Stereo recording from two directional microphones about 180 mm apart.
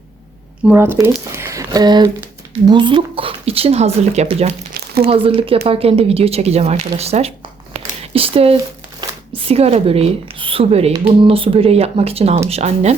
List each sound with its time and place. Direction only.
0.7 s speech: 15° right (ahead or behind); by 13.0 s 35° right (ahead or behind)